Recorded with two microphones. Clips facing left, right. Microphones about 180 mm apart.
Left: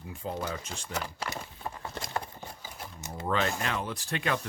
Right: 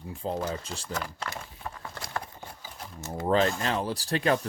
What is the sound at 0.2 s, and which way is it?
Speech, 30° right (ahead or behind).